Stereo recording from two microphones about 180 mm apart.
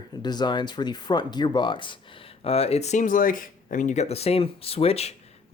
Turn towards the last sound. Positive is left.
turn(degrees=35)  # may be behind; listen again after turning